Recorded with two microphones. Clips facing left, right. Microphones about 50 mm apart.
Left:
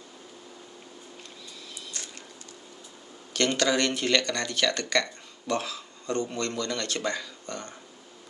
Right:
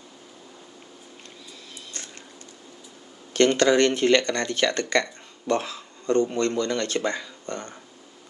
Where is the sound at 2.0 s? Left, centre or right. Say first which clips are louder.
Right 1 dB; right.